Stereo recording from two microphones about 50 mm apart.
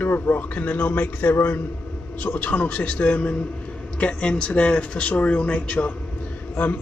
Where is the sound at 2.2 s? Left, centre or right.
Left.